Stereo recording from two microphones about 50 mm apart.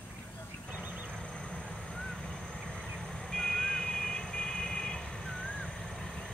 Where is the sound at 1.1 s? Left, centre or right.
Centre.